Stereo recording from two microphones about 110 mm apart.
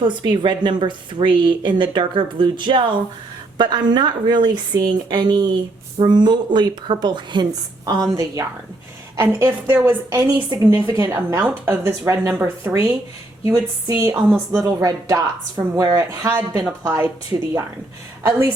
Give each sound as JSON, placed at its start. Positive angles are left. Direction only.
{"t": 0.0, "sound": "a woman's voice", "side_deg": -45}
{"t": 8.1, "sound": "a woman's voice", "side_deg": -35}
{"t": 10.1, "sound": "a woman's voice", "side_deg": -30}
{"t": 14.1, "sound": "a woman's voice", "side_deg": -15}
{"t": 14.5, "sound": "a woman's voice", "side_deg": -25}
{"t": 18.3, "sound": "a woman's voice", "side_deg": -20}